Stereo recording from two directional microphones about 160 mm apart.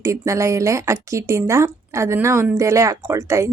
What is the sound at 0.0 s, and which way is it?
Speech, 20° right (ahead or behind).